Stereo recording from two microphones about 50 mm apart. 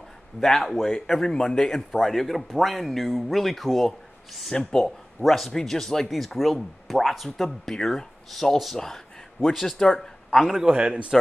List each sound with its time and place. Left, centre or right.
0.4 s speech: centre
2.0 s speech: centre
10.3 s speech: centre
10.6 s a man's voice: centre